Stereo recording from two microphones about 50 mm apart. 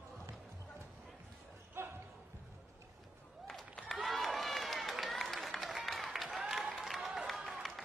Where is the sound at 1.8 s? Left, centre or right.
Right.